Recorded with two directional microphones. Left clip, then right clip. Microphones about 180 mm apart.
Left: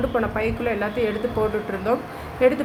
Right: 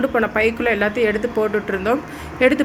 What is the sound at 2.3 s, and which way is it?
Speech, 20° right (ahead or behind).